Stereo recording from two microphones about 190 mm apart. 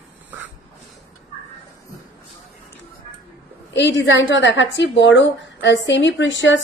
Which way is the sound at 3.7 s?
70° left (ahead or behind).